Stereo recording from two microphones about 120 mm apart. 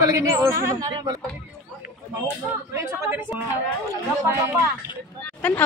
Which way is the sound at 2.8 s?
20° right (ahead or behind).